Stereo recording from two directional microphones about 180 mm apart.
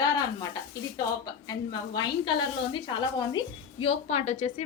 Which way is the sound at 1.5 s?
25° left (ahead or behind).